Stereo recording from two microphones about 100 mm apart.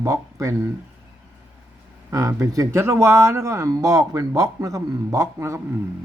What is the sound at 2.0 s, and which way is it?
Speech, 30° right (ahead or behind).